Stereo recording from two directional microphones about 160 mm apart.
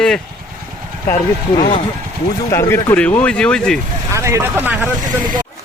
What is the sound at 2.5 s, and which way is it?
Speech, 15° left (ahead or behind).